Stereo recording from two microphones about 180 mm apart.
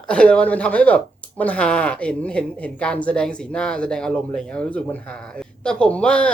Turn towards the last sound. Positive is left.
turn(degrees=5)  # may be behind; listen again after turning